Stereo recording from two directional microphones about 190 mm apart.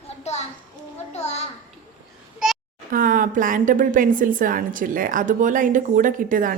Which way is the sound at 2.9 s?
45° right (ahead or behind).